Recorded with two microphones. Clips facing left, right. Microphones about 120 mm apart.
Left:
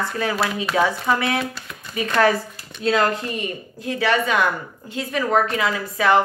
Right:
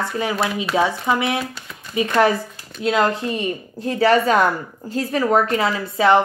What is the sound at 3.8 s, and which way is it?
Speech, 35° right (ahead or behind).